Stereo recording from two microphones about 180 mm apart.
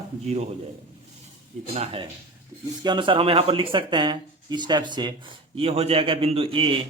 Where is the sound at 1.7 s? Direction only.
30° right (ahead or behind).